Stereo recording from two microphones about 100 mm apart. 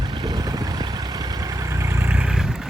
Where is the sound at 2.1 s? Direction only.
10° right (ahead or behind).